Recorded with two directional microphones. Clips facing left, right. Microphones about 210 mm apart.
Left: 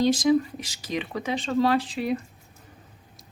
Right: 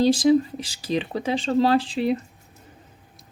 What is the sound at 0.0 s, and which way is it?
Speech, 30° right (ahead or behind).